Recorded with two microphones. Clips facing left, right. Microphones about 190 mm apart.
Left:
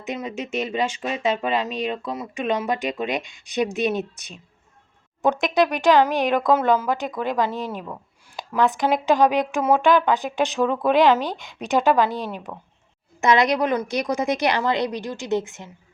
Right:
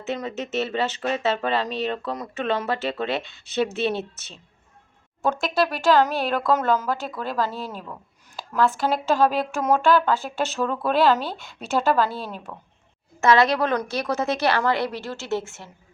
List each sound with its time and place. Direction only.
0.0 s speech: 15° left (ahead or behind)